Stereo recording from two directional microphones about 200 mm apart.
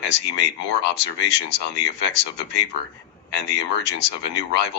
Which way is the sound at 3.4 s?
60° left (ahead or behind).